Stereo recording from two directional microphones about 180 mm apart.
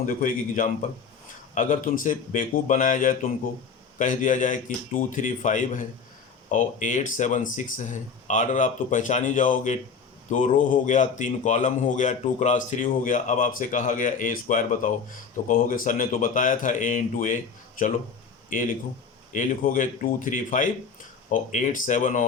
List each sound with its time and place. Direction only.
0.1 s a man's voice: 45° left (ahead or behind)